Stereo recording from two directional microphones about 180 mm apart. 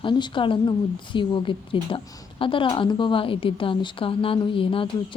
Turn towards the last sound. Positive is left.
turn(degrees=30)  # may be behind; listen again after turning